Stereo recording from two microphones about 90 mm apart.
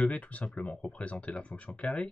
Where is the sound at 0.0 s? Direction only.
15° left (ahead or behind).